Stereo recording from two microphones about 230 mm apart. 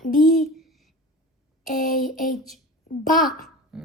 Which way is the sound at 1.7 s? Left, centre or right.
Left.